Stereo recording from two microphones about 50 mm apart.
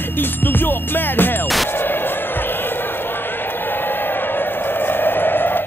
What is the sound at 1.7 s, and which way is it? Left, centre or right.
Music, left.